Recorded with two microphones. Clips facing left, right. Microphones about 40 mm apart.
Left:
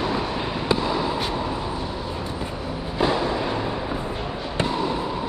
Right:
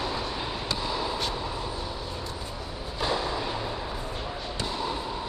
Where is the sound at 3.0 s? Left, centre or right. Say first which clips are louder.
Left 5 dB; left.